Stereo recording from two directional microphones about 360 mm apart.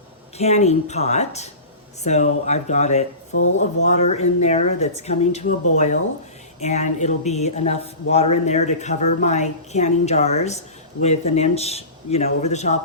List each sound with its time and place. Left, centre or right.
0.3 s a woman's voice: centre